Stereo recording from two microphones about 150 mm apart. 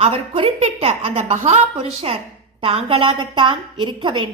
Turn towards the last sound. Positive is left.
turn(degrees=-30)  # may be behind; listen again after turning